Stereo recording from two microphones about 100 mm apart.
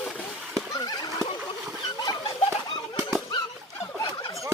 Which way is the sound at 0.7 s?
40° left (ahead or behind).